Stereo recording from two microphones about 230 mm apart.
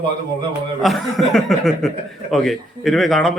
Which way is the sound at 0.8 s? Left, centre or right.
Centre.